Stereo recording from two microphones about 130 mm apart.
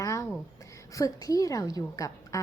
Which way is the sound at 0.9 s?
25° left (ahead or behind).